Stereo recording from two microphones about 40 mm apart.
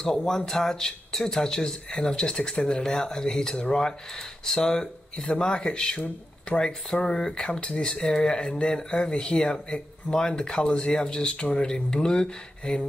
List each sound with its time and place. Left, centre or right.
0.0 s speech: centre